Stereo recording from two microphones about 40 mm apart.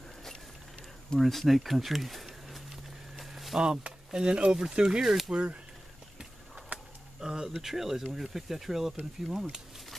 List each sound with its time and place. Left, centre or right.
1.2 s speech: centre
3.2 s a sound: centre
3.5 s speech: centre
5.0 s speech: centre
5.3 s speech: right
6.7 s a sound: right
7.2 s speech: centre
9.3 s speech: centre